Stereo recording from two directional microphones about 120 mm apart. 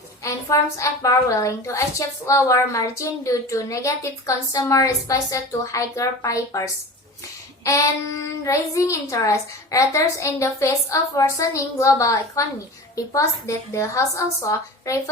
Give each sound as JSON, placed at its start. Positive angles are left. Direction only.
{"t": 0.2, "sound": "a woman's voice", "side_deg": 25}
{"t": 7.6, "sound": "child singing", "side_deg": 30}
{"t": 8.4, "sound": "a woman's voice", "side_deg": 25}
{"t": 13.7, "sound": "a woman's voice", "side_deg": 25}